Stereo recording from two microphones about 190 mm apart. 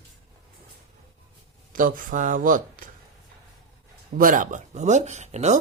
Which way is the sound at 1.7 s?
45° right (ahead or behind).